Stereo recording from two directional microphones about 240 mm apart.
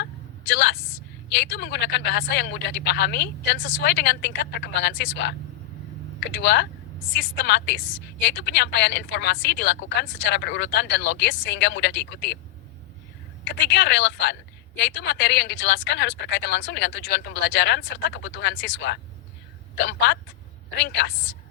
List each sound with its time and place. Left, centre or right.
0.0 s a sound: left
1.3 s a woman's voice: left
13.7 s a woman's voice: left